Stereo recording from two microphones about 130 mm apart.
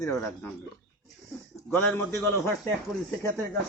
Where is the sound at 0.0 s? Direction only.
25° left (ahead or behind).